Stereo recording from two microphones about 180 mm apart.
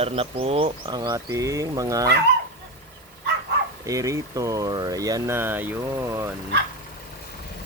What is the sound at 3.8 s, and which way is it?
Speech, 15° right (ahead or behind).